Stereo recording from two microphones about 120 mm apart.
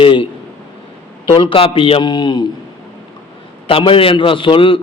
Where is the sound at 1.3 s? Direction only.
45° left (ahead or behind).